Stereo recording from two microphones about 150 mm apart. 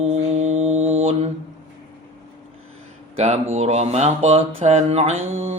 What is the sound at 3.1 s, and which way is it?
Speech, 50° right (ahead or behind).